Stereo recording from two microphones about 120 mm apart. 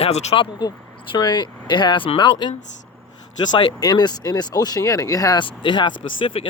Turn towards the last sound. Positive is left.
turn(degrees=45)  # may be behind; listen again after turning